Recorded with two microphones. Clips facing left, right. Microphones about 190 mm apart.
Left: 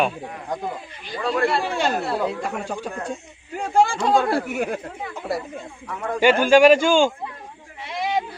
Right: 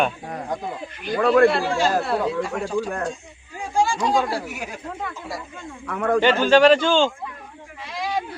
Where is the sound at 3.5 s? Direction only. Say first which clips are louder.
Left 3 dB; 60° left (ahead or behind).